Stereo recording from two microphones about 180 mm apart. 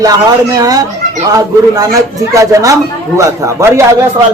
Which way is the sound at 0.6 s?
20° right (ahead or behind).